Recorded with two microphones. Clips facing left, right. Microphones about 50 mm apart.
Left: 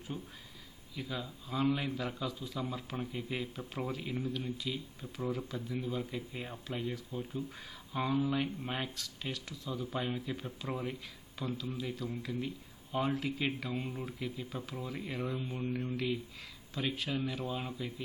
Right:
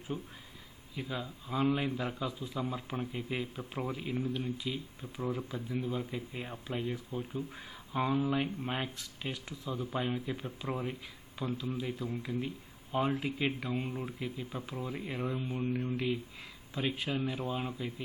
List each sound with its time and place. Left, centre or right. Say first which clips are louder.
0.1 s a man's voice: right 4 dB; centre
2.9 s speech: right 2 dB; centre
4.1 s speech: right 2 dB; centre
9.9 s a man's voice: right 3 dB; centre
15.4 s a man's voice: right 3 dB; right